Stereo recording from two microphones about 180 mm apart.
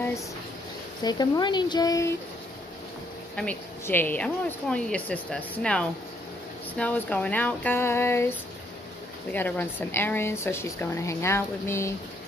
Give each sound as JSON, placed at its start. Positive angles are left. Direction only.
{"t": 1.0, "sound": "speech", "side_deg": 20}
{"t": 3.3, "sound": "speech", "side_deg": 10}